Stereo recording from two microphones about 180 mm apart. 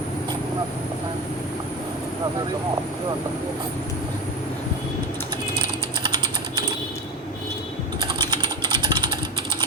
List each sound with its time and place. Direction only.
8.3 s typing: 25° right (ahead or behind)